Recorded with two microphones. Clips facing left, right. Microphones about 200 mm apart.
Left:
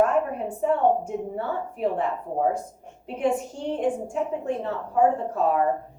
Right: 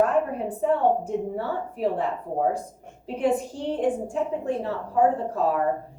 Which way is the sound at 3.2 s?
35° right (ahead or behind).